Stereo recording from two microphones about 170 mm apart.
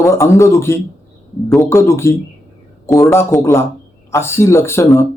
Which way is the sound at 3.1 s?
15° left (ahead or behind).